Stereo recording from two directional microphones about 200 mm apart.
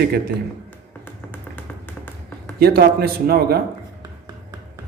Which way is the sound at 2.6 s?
50° right (ahead or behind).